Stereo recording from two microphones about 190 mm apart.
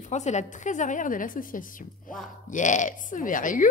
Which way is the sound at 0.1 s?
35° left (ahead or behind).